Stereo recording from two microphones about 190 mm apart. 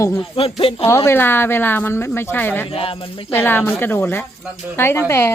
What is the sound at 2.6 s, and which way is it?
Speech, 30° left (ahead or behind).